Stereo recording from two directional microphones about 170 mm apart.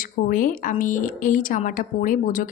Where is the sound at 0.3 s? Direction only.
55° left (ahead or behind).